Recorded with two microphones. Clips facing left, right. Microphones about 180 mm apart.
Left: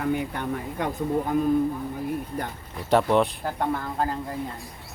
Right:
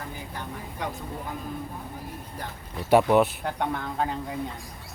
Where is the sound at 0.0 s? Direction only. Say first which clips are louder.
Left 11 dB; 65° left (ahead or behind).